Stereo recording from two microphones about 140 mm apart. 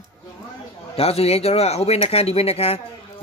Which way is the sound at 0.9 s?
45° left (ahead or behind).